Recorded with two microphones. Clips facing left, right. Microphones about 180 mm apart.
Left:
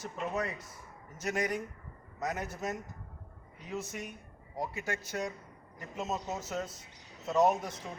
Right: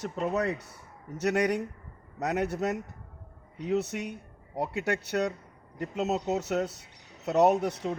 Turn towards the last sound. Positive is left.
turn(degrees=-70)  # may be behind; listen again after turning